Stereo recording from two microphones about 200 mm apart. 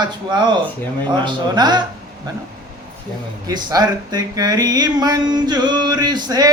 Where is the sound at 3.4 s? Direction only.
20° right (ahead or behind).